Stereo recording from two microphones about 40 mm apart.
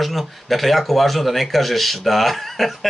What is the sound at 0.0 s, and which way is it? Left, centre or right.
Speech, centre.